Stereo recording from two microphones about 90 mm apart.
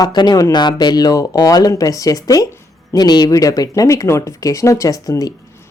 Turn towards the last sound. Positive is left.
turn(degrees=40)  # may be behind; listen again after turning